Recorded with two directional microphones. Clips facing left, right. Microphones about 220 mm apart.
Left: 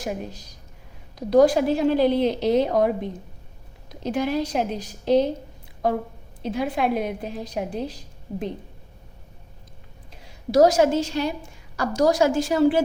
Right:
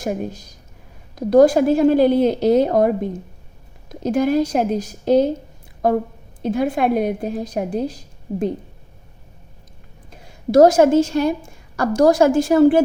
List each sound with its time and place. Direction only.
0.0 s a woman's voice: 50° right (ahead or behind)
6.4 s a woman's voice: 50° right (ahead or behind)
10.1 s a woman's voice: 50° right (ahead or behind)